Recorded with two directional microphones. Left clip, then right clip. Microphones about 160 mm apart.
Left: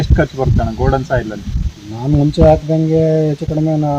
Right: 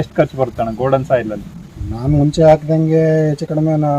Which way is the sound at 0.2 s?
30° right (ahead or behind).